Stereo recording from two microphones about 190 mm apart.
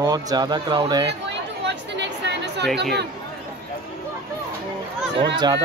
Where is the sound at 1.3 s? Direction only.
65° right (ahead or behind).